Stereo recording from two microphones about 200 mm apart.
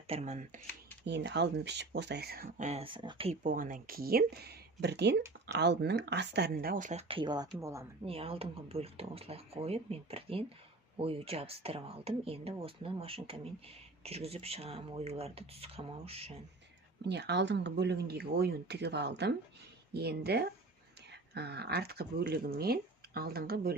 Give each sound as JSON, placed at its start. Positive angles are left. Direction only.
{"t": 0.1, "sound": "speech", "side_deg": -35}
{"t": 1.0, "sound": "speech", "side_deg": -60}
{"t": 2.6, "sound": "speech", "side_deg": -30}
{"t": 3.4, "sound": "speech", "side_deg": -45}
{"t": 7.1, "sound": "speech", "side_deg": -25}
{"t": 8.0, "sound": "speech", "side_deg": -30}
{"t": 17.0, "sound": "speech", "side_deg": -60}